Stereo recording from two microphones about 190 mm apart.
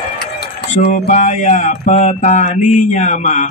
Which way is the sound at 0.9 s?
40° left (ahead or behind).